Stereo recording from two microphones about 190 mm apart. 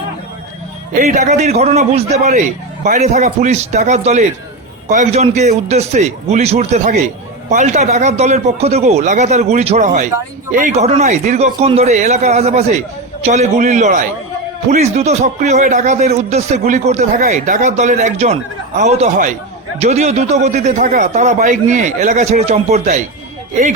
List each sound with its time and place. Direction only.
1.0 s speech: 40° right (ahead or behind)